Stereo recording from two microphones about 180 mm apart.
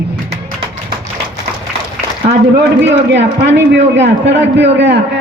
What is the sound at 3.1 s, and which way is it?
A man's voice, 75° right (ahead or behind).